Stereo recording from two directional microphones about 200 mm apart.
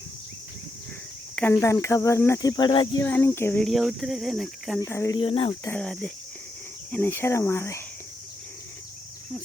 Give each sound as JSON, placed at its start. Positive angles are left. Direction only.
{"t": 1.4, "sound": "cricket", "side_deg": 10}
{"t": 3.0, "sound": "speech", "side_deg": 10}
{"t": 4.9, "sound": "speech", "side_deg": 15}
{"t": 5.6, "sound": "speech", "side_deg": 5}
{"t": 6.9, "sound": "cricket", "side_deg": 10}